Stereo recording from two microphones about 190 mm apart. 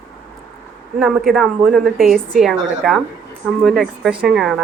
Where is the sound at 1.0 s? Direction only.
Centre (ahead or behind).